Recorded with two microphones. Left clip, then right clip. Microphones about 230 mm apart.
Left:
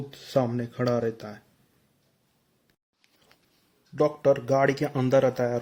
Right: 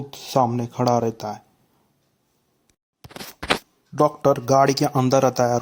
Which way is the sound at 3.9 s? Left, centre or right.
Right.